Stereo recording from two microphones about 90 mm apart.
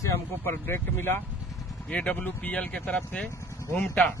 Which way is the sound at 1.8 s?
15° left (ahead or behind).